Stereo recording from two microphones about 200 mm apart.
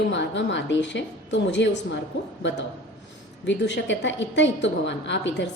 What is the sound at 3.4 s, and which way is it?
A woman's voice, 65° left (ahead or behind).